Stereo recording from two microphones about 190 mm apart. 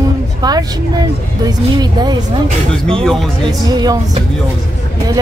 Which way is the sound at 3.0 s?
Centre (ahead or behind).